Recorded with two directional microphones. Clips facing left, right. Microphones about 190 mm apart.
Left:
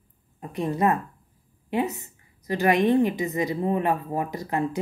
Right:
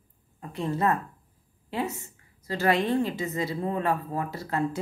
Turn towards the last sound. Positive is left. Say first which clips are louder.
# left 3 dB
turn(degrees=15)  # may be behind; listen again after turning